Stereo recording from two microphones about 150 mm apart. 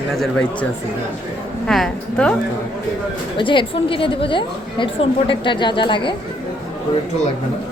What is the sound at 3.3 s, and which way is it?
A woman's voice, 35° left (ahead or behind).